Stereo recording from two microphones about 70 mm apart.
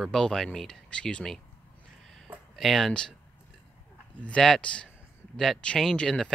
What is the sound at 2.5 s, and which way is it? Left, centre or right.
Speech, centre.